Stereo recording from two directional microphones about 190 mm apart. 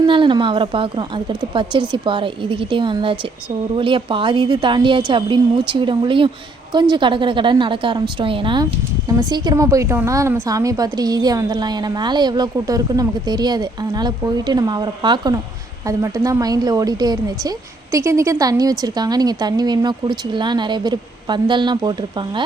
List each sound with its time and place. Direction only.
0.0 s a woman's voice: 25° right (ahead or behind)